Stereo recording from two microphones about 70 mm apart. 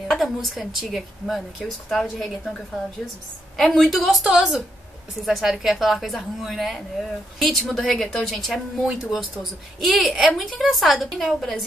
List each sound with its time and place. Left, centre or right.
0.1 s a woman's voice: centre
3.5 s a woman's voice: centre